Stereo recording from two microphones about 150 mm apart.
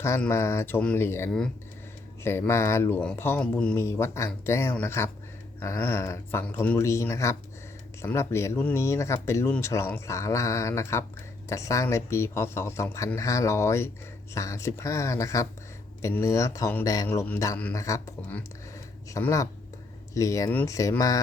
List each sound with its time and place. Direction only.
0.2 s speech: 15° left (ahead or behind)
17.1 s speech: 15° left (ahead or behind)